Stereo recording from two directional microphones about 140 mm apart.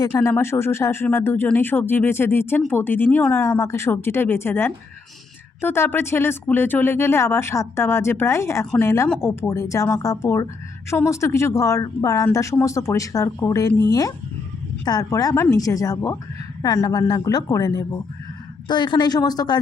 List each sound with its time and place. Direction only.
0.0 s speech: 20° left (ahead or behind)